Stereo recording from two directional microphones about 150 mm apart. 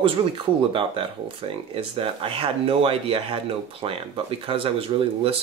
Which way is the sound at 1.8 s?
35° right (ahead or behind).